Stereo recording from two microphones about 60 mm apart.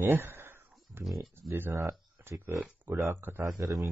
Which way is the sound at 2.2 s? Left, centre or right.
Right.